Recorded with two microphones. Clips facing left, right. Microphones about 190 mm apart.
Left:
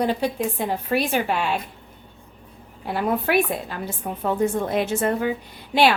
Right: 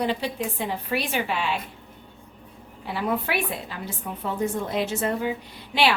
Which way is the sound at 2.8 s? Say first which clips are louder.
Left 4 dB; 45° left (ahead or behind).